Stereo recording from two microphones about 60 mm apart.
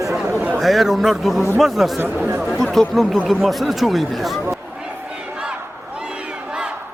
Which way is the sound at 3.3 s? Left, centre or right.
Centre.